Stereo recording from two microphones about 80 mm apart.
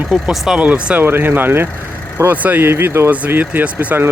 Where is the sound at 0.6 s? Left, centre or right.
Centre.